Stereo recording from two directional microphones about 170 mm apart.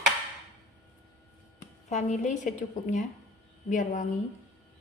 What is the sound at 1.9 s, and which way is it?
A woman's voice, 45° left (ahead or behind).